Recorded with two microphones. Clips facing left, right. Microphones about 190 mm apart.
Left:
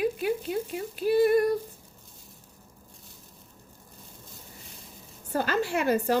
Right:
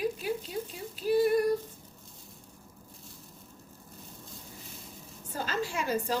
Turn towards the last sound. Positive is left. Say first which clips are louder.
# left 6 dB
turn(degrees=65)  # may be behind; listen again after turning